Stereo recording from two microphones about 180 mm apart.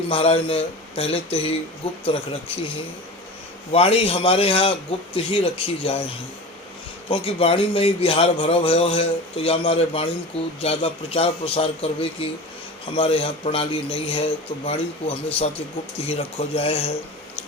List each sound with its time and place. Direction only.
0.1 s speech: 30° left (ahead or behind)
3.7 s speech: 35° left (ahead or behind)
7.1 s speech: 30° left (ahead or behind)